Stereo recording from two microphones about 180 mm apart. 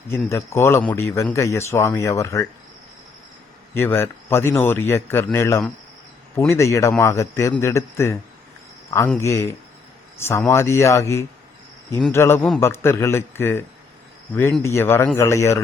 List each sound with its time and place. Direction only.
0.3 s speech: 15° left (ahead or behind)
3.8 s speech: 15° left (ahead or behind)